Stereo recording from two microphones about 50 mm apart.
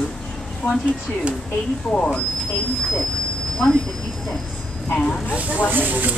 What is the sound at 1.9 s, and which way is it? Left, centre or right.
Speech, left.